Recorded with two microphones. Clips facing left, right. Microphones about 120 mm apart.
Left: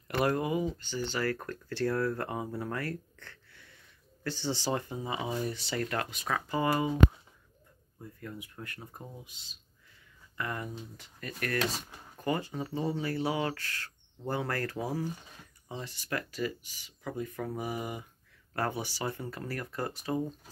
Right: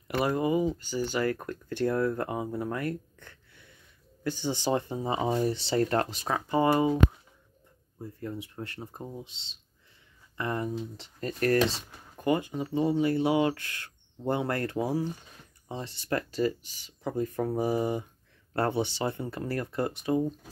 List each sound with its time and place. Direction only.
0.1 s speech: 5° right (ahead or behind)
0.6 s speech: 10° right (ahead or behind)
8.0 s speech: 30° right (ahead or behind)
12.2 s speech: 20° right (ahead or behind)